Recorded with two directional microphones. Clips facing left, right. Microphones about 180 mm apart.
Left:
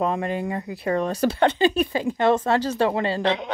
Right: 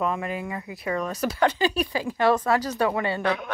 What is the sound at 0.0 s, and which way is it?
Speech, 30° left (ahead or behind).